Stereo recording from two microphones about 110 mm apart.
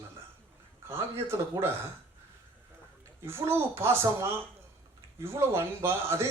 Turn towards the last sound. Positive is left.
turn(degrees=-25)  # may be behind; listen again after turning